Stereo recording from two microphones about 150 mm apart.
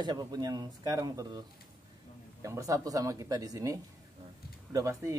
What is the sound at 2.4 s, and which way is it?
A man's voice, 20° right (ahead or behind).